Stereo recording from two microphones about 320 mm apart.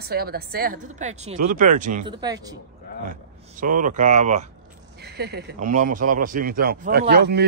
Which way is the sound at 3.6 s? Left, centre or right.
Right.